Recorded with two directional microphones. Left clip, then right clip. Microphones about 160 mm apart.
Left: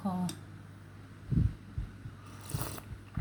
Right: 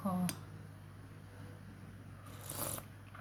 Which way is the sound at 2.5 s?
15° left (ahead or behind).